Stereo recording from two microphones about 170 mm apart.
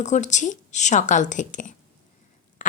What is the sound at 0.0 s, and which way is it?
Speech, 45° left (ahead or behind).